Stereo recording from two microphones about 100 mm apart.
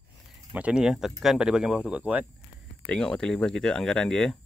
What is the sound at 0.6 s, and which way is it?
Speech, 10° right (ahead or behind).